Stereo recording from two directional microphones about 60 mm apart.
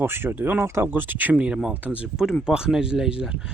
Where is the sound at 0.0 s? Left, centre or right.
Right.